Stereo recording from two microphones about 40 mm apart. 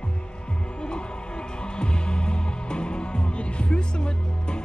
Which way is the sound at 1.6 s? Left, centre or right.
Left.